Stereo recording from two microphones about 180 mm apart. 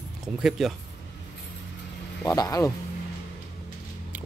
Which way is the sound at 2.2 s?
20° left (ahead or behind).